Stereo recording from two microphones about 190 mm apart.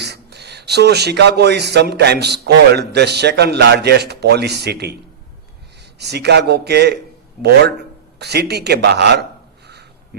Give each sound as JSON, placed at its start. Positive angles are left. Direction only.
{"t": 0.0, "sound": "speech", "side_deg": -60}
{"t": 6.0, "sound": "speech", "side_deg": -60}
{"t": 8.2, "sound": "speech", "side_deg": -60}